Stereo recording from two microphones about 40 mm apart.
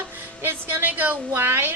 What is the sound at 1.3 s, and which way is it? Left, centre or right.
Speech, right.